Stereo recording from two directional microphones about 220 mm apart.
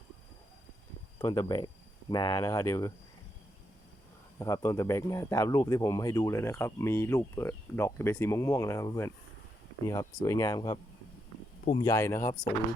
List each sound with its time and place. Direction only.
1.2 s speech: 15° left (ahead or behind)
4.4 s a man's voice: 15° left (ahead or behind)
11.8 s a man's voice: 15° left (ahead or behind)